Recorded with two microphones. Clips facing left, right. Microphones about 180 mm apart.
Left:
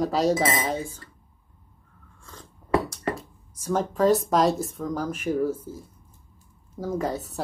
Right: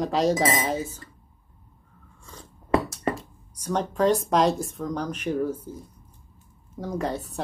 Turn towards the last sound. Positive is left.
turn(degrees=0)  # may be behind; listen again after turning